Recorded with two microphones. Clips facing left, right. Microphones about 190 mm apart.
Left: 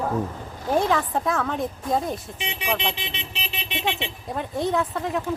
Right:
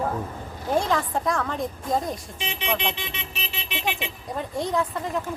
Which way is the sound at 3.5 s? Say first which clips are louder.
Left 2 dB; 20° left (ahead or behind).